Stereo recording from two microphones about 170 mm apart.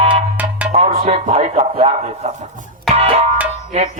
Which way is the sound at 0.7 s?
40° right (ahead or behind).